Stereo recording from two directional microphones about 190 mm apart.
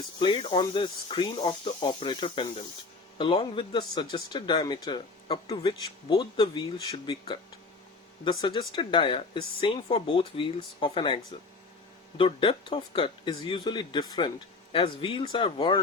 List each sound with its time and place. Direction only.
0.2 s speech: 25° left (ahead or behind)